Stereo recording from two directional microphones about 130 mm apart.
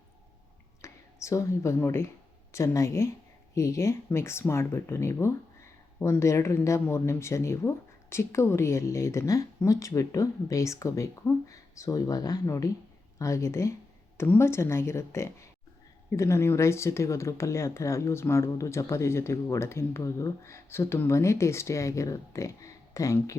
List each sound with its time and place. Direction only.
0.8 s speech: 25° left (ahead or behind)